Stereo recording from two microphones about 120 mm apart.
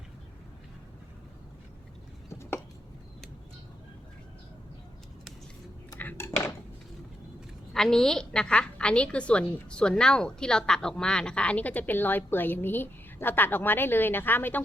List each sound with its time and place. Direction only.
2.3 s a sound: 20° left (ahead or behind)
6.0 s dishes: 20° left (ahead or behind)
7.7 s a woman's voice: 5° left (ahead or behind)